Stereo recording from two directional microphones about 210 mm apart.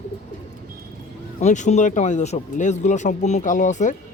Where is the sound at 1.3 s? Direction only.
35° left (ahead or behind).